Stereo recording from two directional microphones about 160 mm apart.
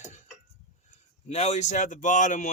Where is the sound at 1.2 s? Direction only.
45° left (ahead or behind).